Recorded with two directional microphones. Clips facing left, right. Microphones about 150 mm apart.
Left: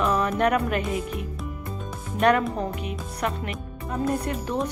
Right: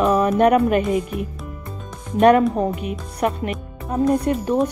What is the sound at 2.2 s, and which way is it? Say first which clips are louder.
Speech: right 7 dB; 25° right (ahead or behind).